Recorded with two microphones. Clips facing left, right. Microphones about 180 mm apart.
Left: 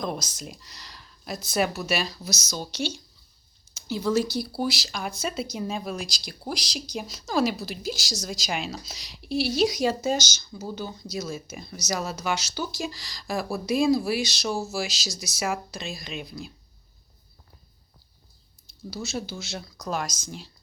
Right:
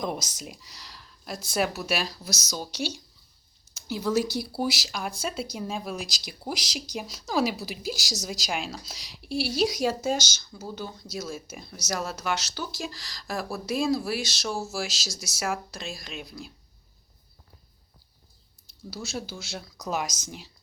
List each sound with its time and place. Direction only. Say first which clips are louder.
0.0 s speech: even; 15° right (ahead or behind)
3.8 s a woman's voice: left 1 dB; 5° right (ahead or behind)
4.9 s a woman's voice: left 1 dB; 5° right (ahead or behind)
18.9 s speech: left 3 dB; 5° right (ahead or behind)